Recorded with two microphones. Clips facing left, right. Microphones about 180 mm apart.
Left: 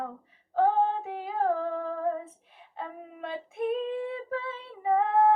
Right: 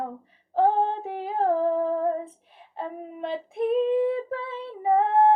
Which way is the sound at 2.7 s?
30° right (ahead or behind).